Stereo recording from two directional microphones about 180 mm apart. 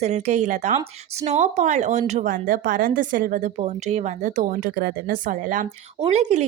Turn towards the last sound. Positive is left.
turn(degrees=-40)  # may be behind; listen again after turning